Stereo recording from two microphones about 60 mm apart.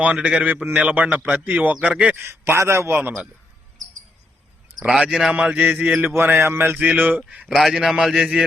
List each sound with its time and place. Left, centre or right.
0.0 s a man's voice: centre
2.1 s a sound: right
2.6 s a man's voice: right
4.8 s speech: centre
5.4 s a man's voice: right
6.1 s a sound: right
6.7 s a man's voice: right
7.4 s a man's voice: centre